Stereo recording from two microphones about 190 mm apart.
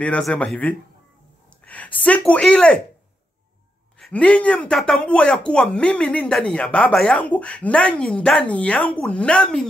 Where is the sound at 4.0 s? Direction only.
5° left (ahead or behind).